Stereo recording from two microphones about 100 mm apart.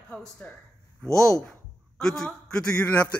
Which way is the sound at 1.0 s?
30° right (ahead or behind).